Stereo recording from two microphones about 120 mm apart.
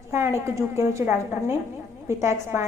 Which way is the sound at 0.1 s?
20° right (ahead or behind).